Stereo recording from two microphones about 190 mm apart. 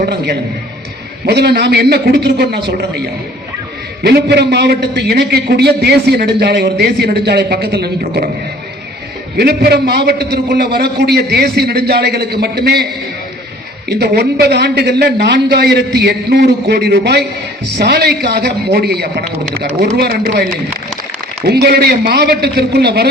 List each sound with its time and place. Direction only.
0.0 s a man's voice: 60° right (ahead or behind)
4.0 s a man's voice: 60° right (ahead or behind)
9.4 s a man's voice: 55° right (ahead or behind)
14.0 s a man's voice: 60° right (ahead or behind)